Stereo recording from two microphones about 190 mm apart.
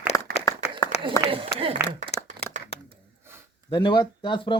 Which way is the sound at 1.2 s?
30° right (ahead or behind).